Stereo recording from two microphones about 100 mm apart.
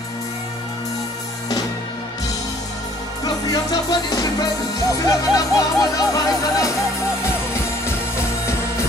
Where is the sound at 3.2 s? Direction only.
40° left (ahead or behind).